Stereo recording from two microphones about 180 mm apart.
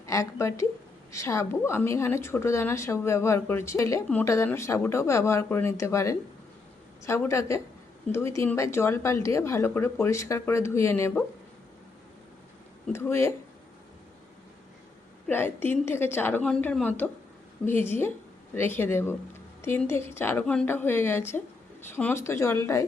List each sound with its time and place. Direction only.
0.0 s a woman's voice: 15° left (ahead or behind)
12.9 s a woman's voice: 15° left (ahead or behind)
15.3 s a woman's voice: 10° left (ahead or behind)